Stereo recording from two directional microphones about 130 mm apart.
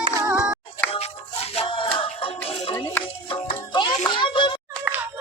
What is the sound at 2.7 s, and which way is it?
Music, 15° left (ahead or behind).